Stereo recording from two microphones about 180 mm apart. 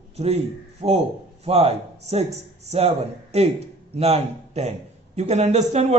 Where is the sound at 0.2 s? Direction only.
35° right (ahead or behind).